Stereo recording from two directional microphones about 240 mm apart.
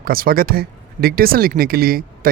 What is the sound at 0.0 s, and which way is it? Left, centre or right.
Speech, right.